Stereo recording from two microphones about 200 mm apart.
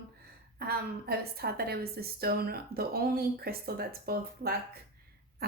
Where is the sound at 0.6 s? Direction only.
50° right (ahead or behind).